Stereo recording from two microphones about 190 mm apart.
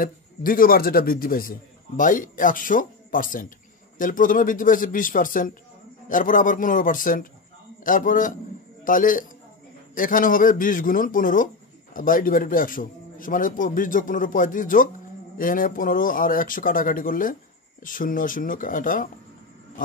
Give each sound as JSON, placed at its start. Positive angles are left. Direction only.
{"t": 0.0, "sound": "a man's voice", "side_deg": 50}